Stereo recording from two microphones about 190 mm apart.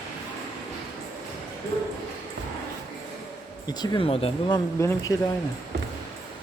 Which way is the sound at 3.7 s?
25° left (ahead or behind).